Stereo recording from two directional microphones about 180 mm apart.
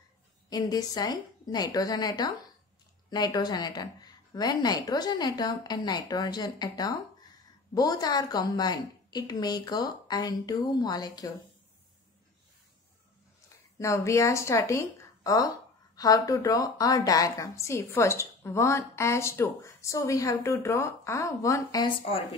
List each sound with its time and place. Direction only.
0.5 s a woman's voice: 20° left (ahead or behind)
13.7 s a woman's voice: 15° left (ahead or behind)